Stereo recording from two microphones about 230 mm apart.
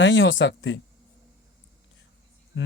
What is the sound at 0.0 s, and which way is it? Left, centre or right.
Speech, left.